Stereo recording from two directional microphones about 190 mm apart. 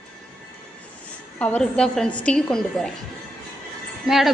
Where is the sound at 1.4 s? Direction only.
5° left (ahead or behind).